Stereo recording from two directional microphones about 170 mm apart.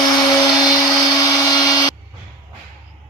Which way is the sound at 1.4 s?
20° left (ahead or behind).